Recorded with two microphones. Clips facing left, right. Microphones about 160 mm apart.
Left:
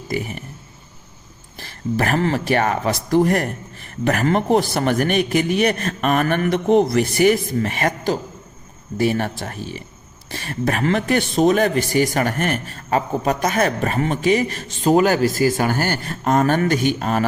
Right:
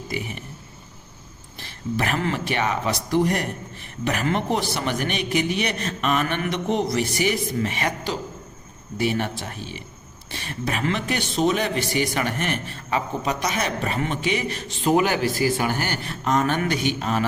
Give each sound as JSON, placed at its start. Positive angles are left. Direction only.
{"t": 0.1, "sound": "a man's voice", "side_deg": 45}
{"t": 1.5, "sound": "a man's voice", "side_deg": 45}